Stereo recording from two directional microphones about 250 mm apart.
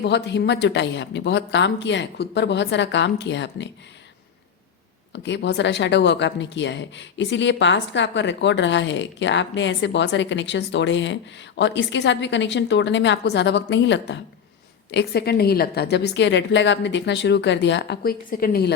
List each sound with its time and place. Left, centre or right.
0.0 s a woman's voice: left
5.1 s a woman's voice: left